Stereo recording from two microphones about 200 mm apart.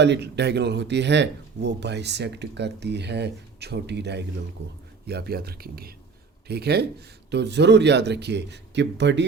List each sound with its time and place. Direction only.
0.0 s speech: 60° right (ahead or behind)